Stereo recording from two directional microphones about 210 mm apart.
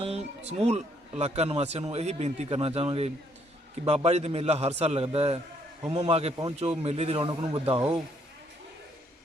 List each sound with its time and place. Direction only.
0.0 s a man's voice: 30° right (ahead or behind)